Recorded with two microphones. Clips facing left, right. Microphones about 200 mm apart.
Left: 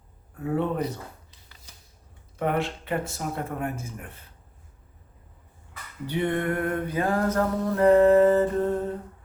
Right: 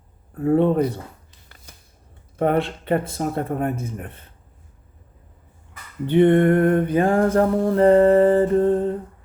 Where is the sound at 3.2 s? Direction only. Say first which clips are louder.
Right 7 dB; 40° right (ahead or behind).